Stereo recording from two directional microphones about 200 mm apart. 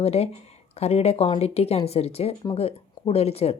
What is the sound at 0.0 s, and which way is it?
Speech, 30° left (ahead or behind).